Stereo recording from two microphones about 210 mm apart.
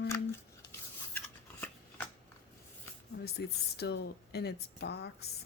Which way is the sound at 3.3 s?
50° left (ahead or behind).